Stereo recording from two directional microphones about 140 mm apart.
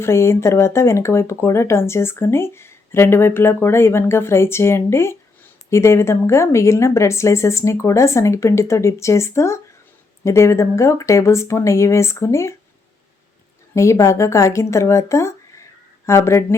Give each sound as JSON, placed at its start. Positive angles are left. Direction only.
{"t": 0.0, "sound": "speech", "side_deg": 20}
{"t": 13.7, "sound": "speech", "side_deg": 20}